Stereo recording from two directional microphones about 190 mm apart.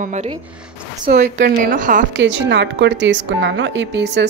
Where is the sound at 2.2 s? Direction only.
70° right (ahead or behind).